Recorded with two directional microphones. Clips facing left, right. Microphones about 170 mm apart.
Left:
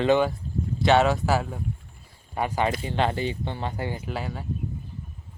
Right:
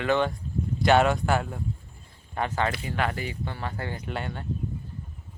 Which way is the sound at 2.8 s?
25° left (ahead or behind).